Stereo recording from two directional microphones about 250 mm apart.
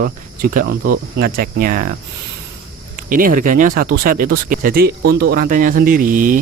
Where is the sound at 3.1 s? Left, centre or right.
Right.